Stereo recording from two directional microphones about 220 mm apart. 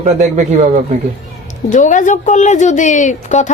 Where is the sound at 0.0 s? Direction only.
30° right (ahead or behind).